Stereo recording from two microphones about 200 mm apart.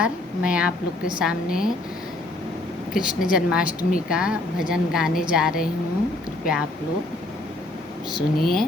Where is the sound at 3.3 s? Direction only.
5° right (ahead or behind).